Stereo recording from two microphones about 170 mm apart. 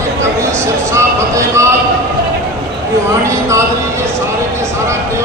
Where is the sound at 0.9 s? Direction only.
15° right (ahead or behind).